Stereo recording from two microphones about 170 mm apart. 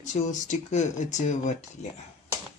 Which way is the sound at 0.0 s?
45° left (ahead or behind).